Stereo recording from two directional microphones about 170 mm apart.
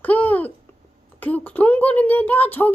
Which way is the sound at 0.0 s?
10° left (ahead or behind).